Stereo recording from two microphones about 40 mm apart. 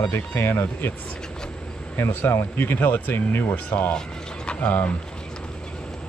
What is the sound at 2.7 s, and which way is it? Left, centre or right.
Speech, left.